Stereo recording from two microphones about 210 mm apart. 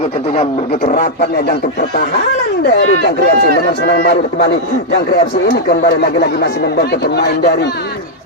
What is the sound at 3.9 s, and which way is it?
Speech, 50° left (ahead or behind).